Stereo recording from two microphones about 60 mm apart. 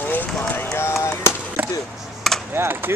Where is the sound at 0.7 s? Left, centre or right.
Left.